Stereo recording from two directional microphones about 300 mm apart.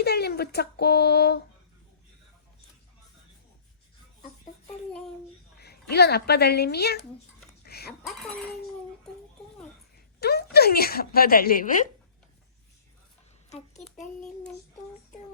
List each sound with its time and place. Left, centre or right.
0.0 s speech: left
5.9 s speech: left
7.6 s cutlery: left
10.2 s speech: left